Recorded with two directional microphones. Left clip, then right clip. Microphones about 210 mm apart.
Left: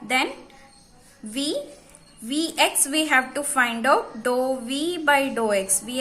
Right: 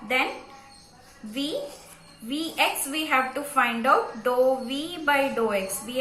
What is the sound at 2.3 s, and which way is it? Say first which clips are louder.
A woman's voice: left 3 dB; 50° left (ahead or behind).